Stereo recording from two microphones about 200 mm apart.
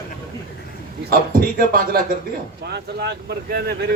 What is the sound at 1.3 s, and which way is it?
Speech, 45° right (ahead or behind).